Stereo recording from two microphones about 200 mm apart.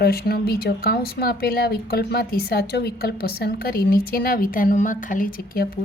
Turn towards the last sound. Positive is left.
turn(degrees=45)  # may be behind; listen again after turning